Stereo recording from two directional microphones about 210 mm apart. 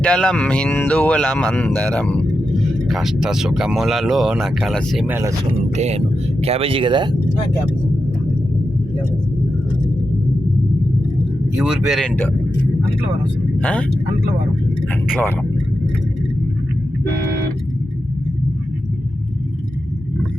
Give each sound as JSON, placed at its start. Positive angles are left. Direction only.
{"t": 0.0, "sound": "speech", "side_deg": 5}
{"t": 5.7, "sound": "speech", "side_deg": -30}
{"t": 11.5, "sound": "speech", "side_deg": -5}
{"t": 13.6, "sound": "speech", "side_deg": 5}